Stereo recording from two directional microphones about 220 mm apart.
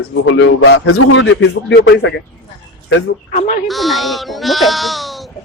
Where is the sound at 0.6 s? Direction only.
85° left; by 2.2 s 55° left (ahead or behind).